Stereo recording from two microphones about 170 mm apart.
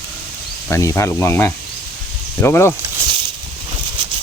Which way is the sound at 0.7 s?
15° left (ahead or behind).